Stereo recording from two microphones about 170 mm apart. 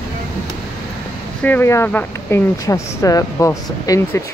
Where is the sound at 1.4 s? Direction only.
10° left (ahead or behind).